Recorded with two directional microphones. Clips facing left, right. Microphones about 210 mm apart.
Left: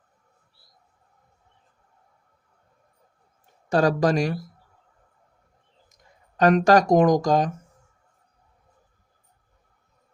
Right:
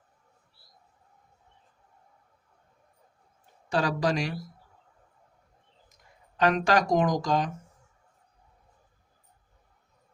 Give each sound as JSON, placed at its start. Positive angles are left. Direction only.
{"t": 3.7, "sound": "speech", "side_deg": 45}
{"t": 6.3, "sound": "speech", "side_deg": 45}